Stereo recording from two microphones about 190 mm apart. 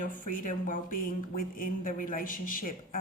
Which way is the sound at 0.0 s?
45° left (ahead or behind).